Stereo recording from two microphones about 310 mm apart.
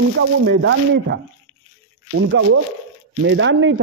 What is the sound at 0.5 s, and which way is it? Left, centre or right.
A man's voice, right.